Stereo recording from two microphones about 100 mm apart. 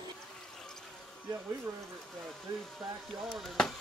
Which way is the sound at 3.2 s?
Centre (ahead or behind).